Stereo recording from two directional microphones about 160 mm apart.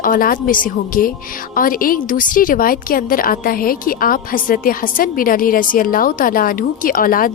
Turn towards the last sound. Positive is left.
turn(degrees=60)  # may be behind; listen again after turning